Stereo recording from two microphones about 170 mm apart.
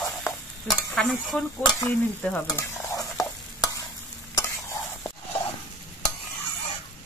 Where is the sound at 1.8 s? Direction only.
15° left (ahead or behind).